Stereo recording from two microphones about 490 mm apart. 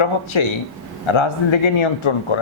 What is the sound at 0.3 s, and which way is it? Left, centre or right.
Speech, left.